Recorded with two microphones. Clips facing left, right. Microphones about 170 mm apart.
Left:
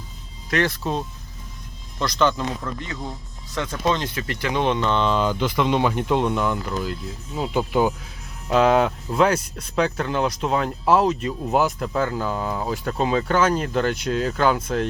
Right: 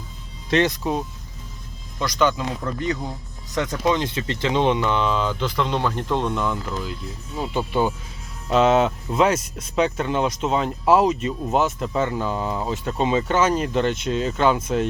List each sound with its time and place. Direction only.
0.5 s speech: 20° right (ahead or behind)
5.2 s speech: 10° left (ahead or behind)
8.4 s speech: centre (ahead or behind)